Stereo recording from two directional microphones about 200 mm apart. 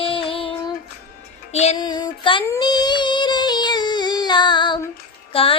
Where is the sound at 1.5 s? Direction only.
35° left (ahead or behind).